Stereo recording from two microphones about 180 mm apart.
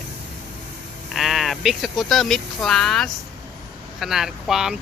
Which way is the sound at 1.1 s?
Centre (ahead or behind).